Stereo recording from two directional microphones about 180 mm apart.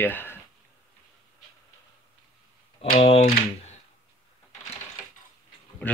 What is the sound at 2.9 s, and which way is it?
Speech, 35° left (ahead or behind).